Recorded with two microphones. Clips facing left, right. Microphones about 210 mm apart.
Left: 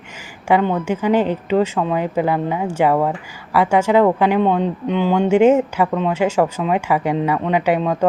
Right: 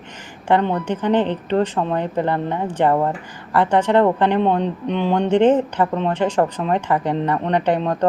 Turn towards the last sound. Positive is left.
turn(degrees=5)  # may be behind; listen again after turning